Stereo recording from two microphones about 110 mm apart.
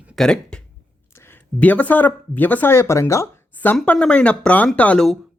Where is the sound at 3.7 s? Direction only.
10° left (ahead or behind).